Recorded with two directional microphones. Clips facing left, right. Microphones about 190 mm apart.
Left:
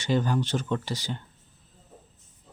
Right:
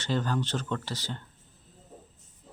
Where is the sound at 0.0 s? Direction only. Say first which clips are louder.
Left 4 dB; 15° left (ahead or behind).